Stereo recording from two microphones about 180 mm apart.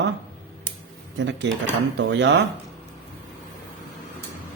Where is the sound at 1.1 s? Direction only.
90° right.